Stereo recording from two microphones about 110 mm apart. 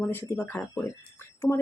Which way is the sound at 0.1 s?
20° left (ahead or behind).